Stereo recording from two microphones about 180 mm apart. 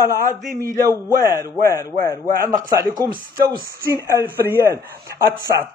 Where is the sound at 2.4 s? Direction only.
20° right (ahead or behind).